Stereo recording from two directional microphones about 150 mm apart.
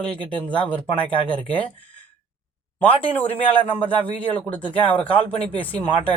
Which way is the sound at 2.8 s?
10° left (ahead or behind).